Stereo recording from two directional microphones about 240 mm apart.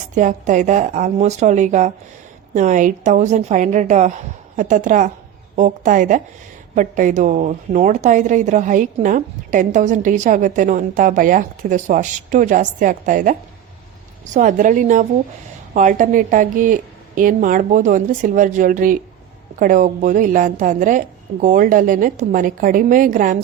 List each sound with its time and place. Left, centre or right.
0.1 s a woman's voice: right
14.3 s a woman's voice: right